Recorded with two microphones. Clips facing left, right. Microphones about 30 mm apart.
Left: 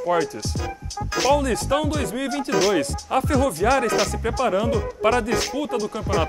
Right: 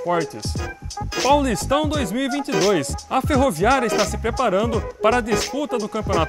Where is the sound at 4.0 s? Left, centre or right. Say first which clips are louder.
Right 2 dB; centre.